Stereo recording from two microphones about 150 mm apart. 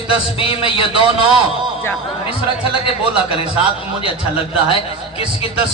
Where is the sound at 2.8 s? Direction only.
35° left (ahead or behind).